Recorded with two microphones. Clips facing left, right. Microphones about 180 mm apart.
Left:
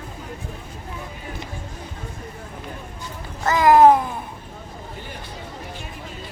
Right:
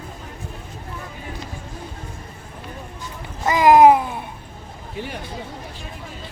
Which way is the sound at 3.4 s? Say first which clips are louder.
Right 1 dB; 15° right (ahead or behind).